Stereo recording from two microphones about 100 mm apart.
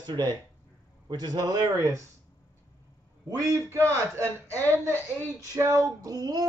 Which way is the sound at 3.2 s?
30° right (ahead or behind).